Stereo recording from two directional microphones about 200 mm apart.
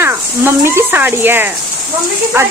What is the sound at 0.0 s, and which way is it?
Speech, 10° right (ahead or behind).